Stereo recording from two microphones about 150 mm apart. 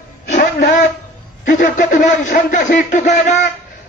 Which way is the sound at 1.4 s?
65° left (ahead or behind).